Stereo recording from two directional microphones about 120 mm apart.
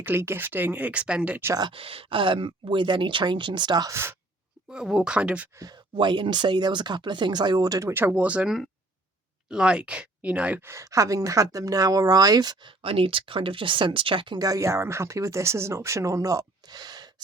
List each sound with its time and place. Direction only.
0.0 s speech: 20° right (ahead or behind)
1.7 s speech: 50° right (ahead or behind)
3.9 s speech: 20° right (ahead or behind)
4.7 s speech: 5° right (ahead or behind)
5.5 s speech: 35° right (ahead or behind); by 10.7 s 10° right (ahead or behind)
10.7 s speech: 25° right (ahead or behind)
12.8 s speech: 50° right (ahead or behind)
14.3 s speech: 30° right (ahead or behind)